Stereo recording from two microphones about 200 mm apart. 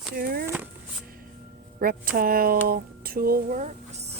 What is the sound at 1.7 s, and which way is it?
Speech, 45° right (ahead or behind).